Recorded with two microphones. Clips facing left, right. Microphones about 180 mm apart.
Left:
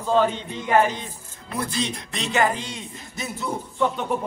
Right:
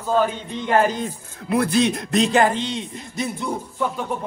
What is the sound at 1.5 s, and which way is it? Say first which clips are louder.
Speech: right 9 dB; 60° right (ahead or behind).